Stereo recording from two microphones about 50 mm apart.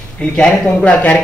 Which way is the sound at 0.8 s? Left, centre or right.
Left.